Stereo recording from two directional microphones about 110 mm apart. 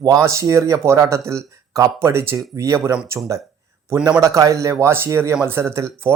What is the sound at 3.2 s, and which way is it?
Speech, 15° right (ahead or behind).